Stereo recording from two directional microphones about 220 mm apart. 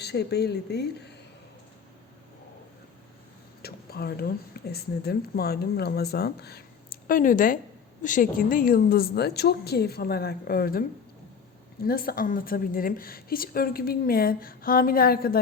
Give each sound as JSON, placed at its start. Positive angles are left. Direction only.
{"t": 0.0, "sound": "a woman's voice", "side_deg": 50}
{"t": 3.6, "sound": "a woman's voice", "side_deg": 45}
{"t": 11.9, "sound": "a woman's voice", "side_deg": 40}